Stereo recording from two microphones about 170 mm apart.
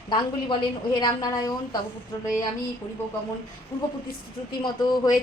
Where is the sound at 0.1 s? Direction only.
25° left (ahead or behind).